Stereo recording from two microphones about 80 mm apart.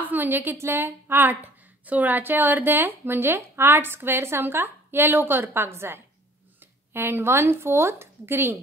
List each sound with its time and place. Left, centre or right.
0.0 s a woman's voice: right